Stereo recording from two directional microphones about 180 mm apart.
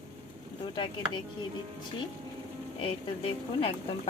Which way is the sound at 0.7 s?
25° left (ahead or behind).